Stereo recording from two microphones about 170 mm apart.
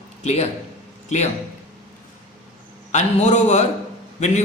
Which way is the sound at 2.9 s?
40° left (ahead or behind).